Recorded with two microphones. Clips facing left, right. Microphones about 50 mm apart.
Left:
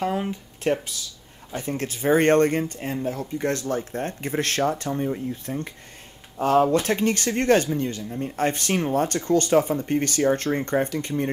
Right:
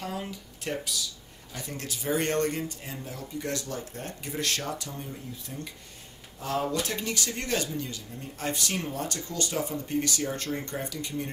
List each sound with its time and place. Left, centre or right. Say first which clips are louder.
0.0 s speech: left 9 dB; left